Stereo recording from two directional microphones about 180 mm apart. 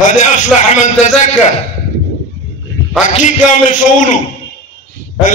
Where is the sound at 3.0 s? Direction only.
45° left (ahead or behind).